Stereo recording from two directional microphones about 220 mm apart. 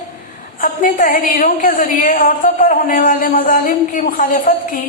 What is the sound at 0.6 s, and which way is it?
A woman's voice, 40° left (ahead or behind).